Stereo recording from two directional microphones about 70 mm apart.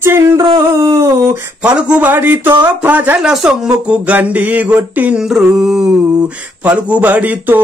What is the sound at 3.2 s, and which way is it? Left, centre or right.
Speech, centre.